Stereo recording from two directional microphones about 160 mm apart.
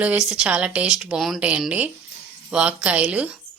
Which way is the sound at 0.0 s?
5° right (ahead or behind).